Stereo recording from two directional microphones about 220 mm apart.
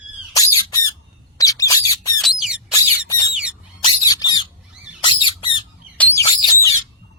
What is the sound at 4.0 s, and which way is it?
Squawk, 15° left (ahead or behind).